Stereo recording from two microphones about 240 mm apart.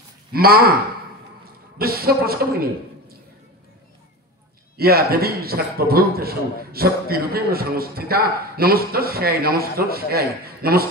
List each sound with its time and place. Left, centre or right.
0.3 s a man's voice: right
1.8 s a man's voice: right
4.7 s a man's voice: right